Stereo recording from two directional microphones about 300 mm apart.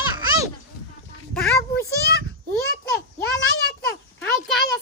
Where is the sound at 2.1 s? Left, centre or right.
Left.